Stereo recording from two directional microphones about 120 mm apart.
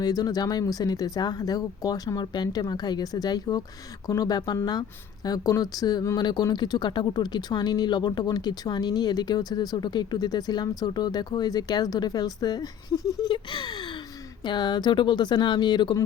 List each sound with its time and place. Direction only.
0.0 s speech: 30° left (ahead or behind)